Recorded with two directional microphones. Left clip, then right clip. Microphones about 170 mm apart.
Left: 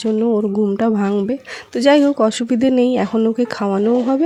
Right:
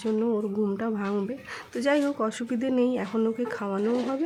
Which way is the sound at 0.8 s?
40° left (ahead or behind).